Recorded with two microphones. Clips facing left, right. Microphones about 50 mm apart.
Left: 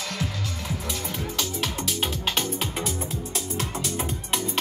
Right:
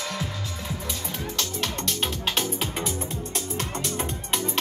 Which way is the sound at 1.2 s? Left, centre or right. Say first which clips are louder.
Even; centre.